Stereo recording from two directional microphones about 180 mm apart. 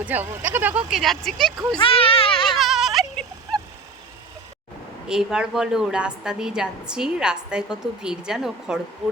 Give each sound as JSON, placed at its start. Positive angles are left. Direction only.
{"t": 0.0, "sound": "a woman's voice", "side_deg": -10}
{"t": 1.8, "sound": "baby cry", "side_deg": 30}
{"t": 2.6, "sound": "a sound", "side_deg": 0}
{"t": 5.0, "sound": "a woman's voice", "side_deg": -5}